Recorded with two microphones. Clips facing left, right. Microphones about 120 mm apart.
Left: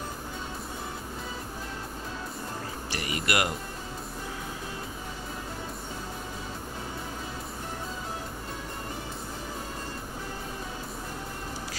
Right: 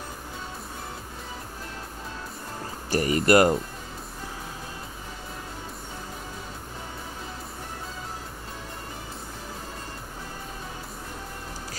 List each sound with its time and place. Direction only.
2.9 s speech: 40° right (ahead or behind)